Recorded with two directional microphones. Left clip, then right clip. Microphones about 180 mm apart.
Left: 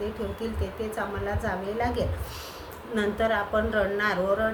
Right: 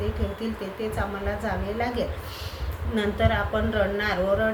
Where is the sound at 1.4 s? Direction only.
15° left (ahead or behind).